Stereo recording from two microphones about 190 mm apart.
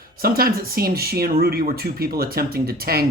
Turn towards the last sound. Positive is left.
turn(degrees=-55)  # may be behind; listen again after turning